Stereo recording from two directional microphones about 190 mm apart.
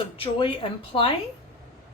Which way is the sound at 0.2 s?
30° left (ahead or behind).